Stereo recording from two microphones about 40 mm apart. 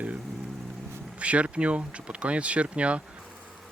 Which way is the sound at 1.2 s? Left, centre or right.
Right.